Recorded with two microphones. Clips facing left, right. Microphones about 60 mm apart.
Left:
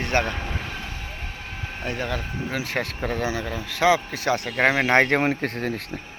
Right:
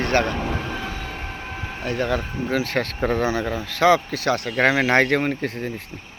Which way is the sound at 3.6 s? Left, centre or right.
Centre.